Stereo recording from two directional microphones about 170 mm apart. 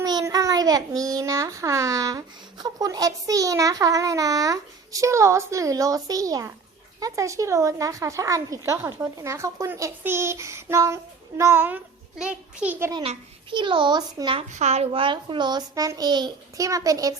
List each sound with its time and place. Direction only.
0.0 s a child's voice: 20° right (ahead or behind)
12.9 s a child's voice: 30° right (ahead or behind)
14.5 s a child's voice: 40° right (ahead or behind); by 17.2 s 20° right (ahead or behind)